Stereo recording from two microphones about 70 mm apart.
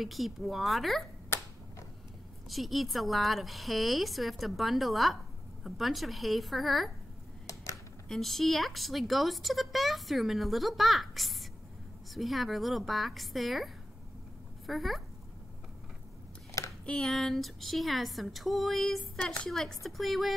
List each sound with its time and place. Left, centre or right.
0.0 s a woman's voice: centre
2.5 s a woman's voice: centre
7.4 s a sound: left
8.1 s a woman's voice: centre
14.7 s a woman's voice: centre
16.8 s a woman's voice: centre